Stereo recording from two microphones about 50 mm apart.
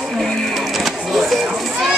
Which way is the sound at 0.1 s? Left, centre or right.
Centre.